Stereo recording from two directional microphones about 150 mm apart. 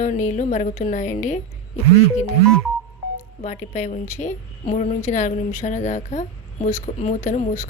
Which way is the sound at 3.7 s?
50° left (ahead or behind).